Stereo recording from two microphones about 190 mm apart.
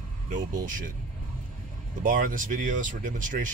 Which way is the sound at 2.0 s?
45° right (ahead or behind).